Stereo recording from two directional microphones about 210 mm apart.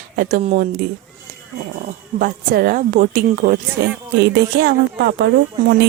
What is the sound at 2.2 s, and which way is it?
A woman's voice, 40° right (ahead or behind).